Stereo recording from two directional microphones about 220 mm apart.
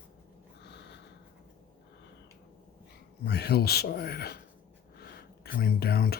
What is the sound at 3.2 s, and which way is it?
A man's voice, 50° left (ahead or behind).